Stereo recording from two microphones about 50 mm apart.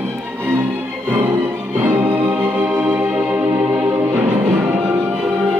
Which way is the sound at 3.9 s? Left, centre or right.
Right.